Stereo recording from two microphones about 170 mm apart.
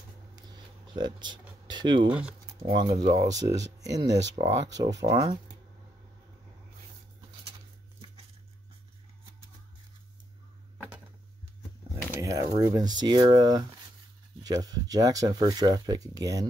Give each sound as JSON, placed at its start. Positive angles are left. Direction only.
{"t": 0.4, "sound": "a sound", "side_deg": -25}
{"t": 1.7, "sound": "speech", "side_deg": -25}
{"t": 12.1, "sound": "speech", "side_deg": -20}